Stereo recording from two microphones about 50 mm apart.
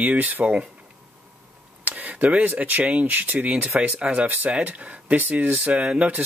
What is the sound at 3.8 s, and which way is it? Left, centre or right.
Speech, right.